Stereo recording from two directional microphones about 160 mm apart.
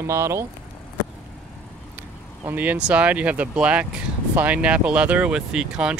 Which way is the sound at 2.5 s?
10° right (ahead or behind).